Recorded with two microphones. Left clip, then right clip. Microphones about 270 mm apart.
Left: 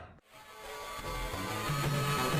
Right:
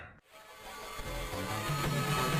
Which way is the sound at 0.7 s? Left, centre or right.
Centre.